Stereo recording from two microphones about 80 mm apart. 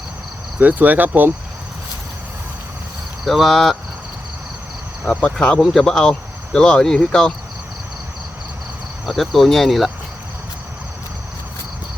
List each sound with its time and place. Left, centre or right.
0.6 s cricket: right
3.2 s speech: centre
5.2 s speech: centre
9.0 s speech: centre